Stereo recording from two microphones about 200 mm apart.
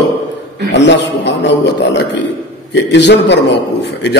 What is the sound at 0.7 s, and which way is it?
A man's voice, 60° left (ahead or behind).